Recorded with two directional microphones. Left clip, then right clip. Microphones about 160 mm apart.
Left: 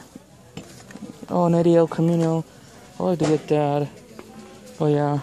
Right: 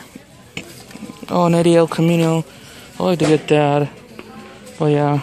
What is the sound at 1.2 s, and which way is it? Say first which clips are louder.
Speech: right 4 dB; 20° left (ahead or behind).